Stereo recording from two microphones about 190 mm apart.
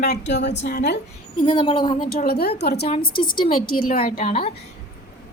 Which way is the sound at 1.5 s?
25° left (ahead or behind).